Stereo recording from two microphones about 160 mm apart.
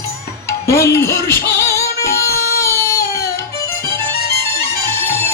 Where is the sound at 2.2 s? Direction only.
70° left (ahead or behind).